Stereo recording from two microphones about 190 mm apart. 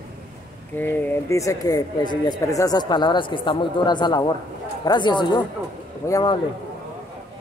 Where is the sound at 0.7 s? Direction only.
10° left (ahead or behind).